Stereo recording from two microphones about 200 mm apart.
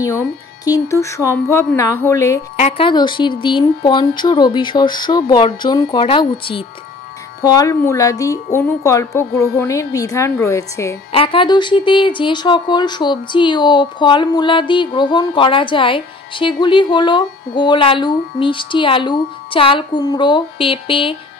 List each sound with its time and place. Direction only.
0.0 s speech: 15° left (ahead or behind)
2.5 s speech: 25° left (ahead or behind)
11.1 s speech: 25° left (ahead or behind)